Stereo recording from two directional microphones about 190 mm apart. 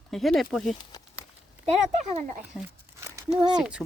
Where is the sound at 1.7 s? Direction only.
35° right (ahead or behind).